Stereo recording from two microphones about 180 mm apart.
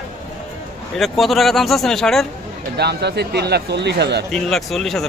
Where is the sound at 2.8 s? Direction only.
65° right (ahead or behind).